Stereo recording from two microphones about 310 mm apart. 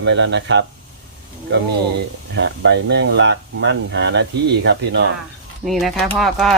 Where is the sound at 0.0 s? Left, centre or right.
Right.